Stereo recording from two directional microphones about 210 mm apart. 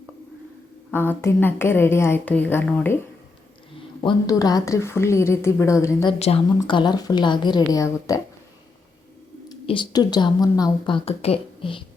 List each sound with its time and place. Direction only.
0.9 s speech: 10° left (ahead or behind)
4.0 s speech: 15° left (ahead or behind)
6.1 s a woman's voice: 30° left (ahead or behind)
9.5 s a woman's voice: 20° left (ahead or behind)